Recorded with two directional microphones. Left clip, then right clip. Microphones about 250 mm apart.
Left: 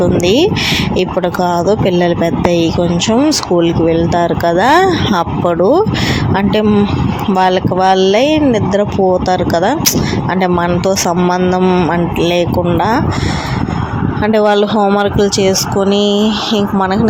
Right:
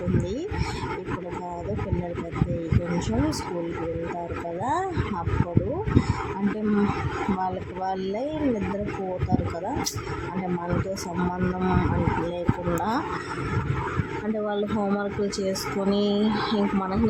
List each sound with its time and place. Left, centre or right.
4.6 s speech: left
7.4 s speech: left
9.3 s speech: left
14.3 s speech: left